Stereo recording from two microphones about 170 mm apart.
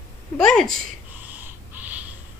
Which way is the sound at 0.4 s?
5° left (ahead or behind).